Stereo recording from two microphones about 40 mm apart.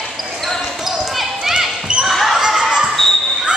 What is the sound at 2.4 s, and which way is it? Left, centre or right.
Basketball bounce, centre.